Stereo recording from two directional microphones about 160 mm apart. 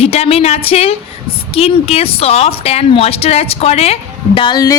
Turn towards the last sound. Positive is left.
turn(degrees=25)  # may be behind; listen again after turning